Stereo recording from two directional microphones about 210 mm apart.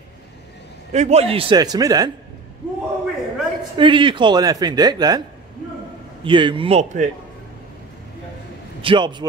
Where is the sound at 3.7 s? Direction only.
25° right (ahead or behind).